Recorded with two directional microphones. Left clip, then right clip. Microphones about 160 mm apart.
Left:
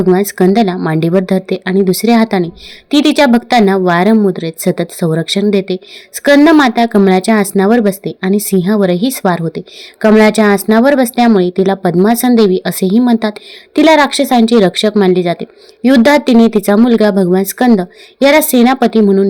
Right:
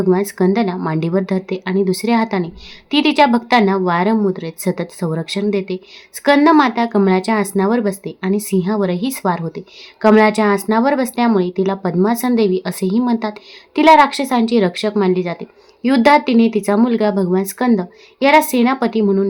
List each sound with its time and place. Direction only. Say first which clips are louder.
0.1 s speech: left 6 dB; 25° left (ahead or behind)